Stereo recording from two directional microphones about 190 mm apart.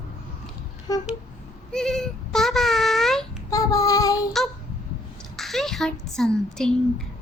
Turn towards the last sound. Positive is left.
turn(degrees=5)  # may be behind; listen again after turning